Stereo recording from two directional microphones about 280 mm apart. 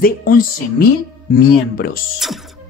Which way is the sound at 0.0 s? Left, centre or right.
Left.